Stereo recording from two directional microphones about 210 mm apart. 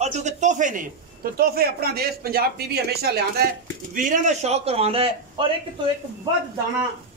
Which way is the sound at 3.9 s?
40° right (ahead or behind).